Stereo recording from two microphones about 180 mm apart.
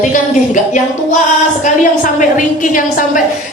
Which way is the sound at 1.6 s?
45° left (ahead or behind).